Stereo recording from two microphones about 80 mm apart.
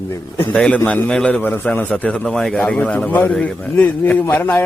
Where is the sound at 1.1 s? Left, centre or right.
Centre.